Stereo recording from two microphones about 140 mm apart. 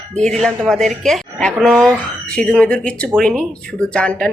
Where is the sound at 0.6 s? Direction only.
5° left (ahead or behind).